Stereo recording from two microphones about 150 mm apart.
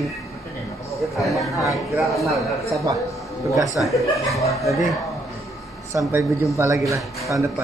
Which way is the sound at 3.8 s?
Centre (ahead or behind).